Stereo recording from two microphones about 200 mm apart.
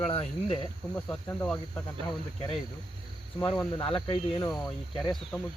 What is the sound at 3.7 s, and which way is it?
Speech, 20° left (ahead or behind).